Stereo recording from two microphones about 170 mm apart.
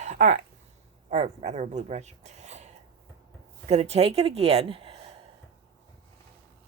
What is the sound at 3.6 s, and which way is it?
Speech, 40° right (ahead or behind).